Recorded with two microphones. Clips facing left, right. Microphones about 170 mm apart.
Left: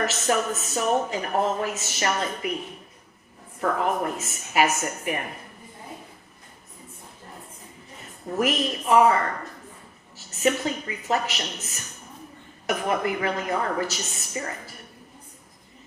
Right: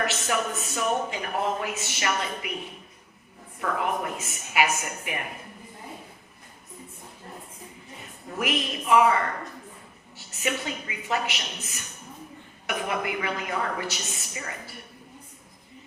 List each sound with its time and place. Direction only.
0.0 s speech: 40° left (ahead or behind)
3.6 s speech: 40° left (ahead or behind)
8.4 s speech: 40° left (ahead or behind)
10.2 s speech: 40° left (ahead or behind)